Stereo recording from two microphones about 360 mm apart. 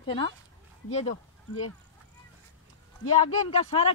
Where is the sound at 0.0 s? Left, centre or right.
Centre.